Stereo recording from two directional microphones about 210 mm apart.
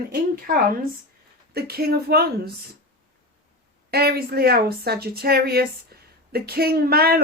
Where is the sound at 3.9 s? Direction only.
45° right (ahead or behind).